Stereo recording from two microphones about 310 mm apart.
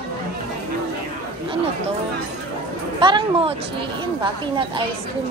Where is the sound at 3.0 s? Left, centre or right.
Centre.